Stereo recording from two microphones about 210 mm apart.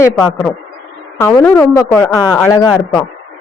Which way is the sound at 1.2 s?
10° left (ahead or behind).